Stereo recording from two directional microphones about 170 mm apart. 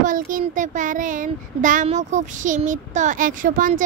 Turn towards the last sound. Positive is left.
turn(degrees=-55)  # may be behind; listen again after turning